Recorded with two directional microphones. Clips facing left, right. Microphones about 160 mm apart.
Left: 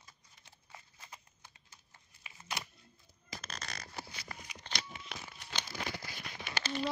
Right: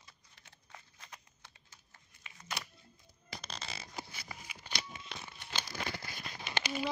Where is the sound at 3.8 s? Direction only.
5° right (ahead or behind).